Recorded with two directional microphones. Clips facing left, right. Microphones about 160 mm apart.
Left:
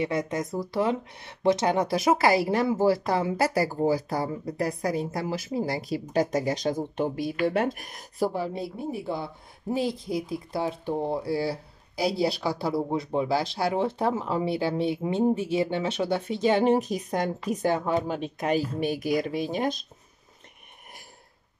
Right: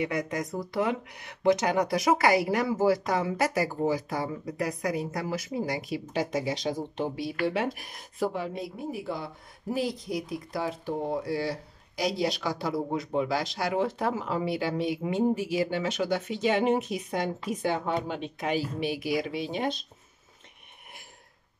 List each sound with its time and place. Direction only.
0.0 s a woman's voice: 25° left (ahead or behind); by 19.8 s 45° left (ahead or behind)